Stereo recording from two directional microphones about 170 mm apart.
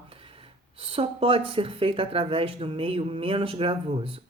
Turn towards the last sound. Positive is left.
turn(degrees=-35)  # may be behind; listen again after turning